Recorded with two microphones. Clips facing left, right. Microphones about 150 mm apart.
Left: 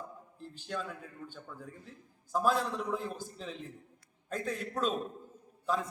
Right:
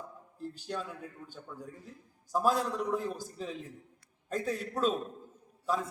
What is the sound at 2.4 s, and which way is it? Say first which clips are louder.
Speech: right 1 dB; 40° right (ahead or behind).